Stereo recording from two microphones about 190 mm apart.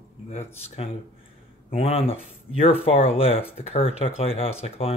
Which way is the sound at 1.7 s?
30° left (ahead or behind).